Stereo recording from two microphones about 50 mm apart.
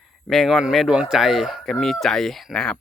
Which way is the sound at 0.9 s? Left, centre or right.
Centre.